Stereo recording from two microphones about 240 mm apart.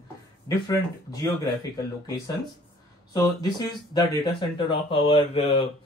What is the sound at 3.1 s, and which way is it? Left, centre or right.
Speech, centre.